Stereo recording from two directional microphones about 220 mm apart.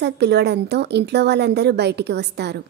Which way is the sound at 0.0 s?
50° right (ahead or behind).